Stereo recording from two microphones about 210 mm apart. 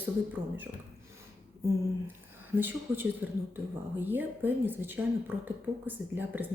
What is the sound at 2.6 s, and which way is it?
Speech, 10° right (ahead or behind).